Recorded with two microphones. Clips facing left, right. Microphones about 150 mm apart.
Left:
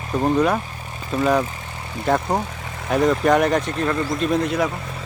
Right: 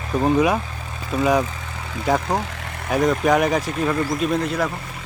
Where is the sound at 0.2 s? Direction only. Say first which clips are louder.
Right 1 dB; centre (ahead or behind).